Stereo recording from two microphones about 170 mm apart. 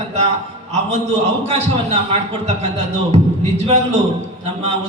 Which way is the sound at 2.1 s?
40° right (ahead or behind).